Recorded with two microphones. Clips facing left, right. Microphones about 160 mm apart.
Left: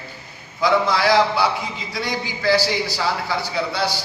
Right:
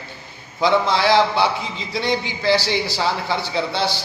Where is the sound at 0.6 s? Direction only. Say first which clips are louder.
Right 1 dB; 25° right (ahead or behind).